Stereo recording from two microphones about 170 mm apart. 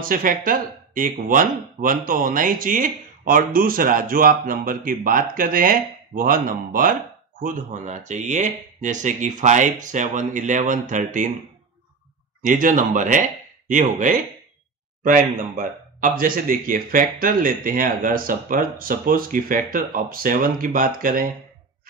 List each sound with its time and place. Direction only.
0.0 s speech: 55° right (ahead or behind)
12.4 s speech: 50° right (ahead or behind)